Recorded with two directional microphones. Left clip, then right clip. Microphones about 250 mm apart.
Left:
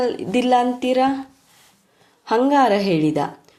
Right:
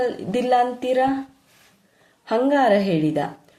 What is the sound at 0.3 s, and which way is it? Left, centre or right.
Speech, left.